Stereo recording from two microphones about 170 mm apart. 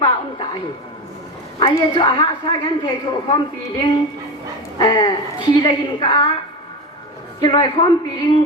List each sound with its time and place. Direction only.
1.5 s a woman's voice: 25° left (ahead or behind)
7.4 s a woman's voice: 25° left (ahead or behind)